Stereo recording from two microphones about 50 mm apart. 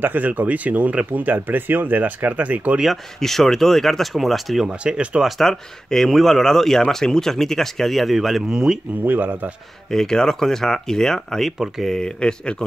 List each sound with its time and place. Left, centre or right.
0.0 s speech: right
3.2 s speech: centre
4.6 s speech: right
5.4 s speech: centre
9.0 s speech: right
9.8 s speech: centre